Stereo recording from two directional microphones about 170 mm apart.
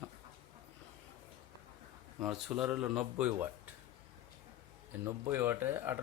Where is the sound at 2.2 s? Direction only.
5° right (ahead or behind).